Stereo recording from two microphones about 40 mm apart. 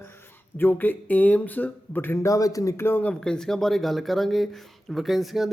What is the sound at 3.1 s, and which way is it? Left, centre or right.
Speech, centre.